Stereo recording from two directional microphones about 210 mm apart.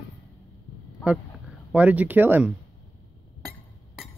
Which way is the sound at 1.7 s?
5° right (ahead or behind).